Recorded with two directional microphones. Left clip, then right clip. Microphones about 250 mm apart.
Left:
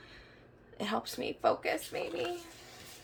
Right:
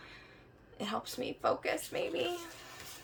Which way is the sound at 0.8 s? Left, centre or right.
Centre.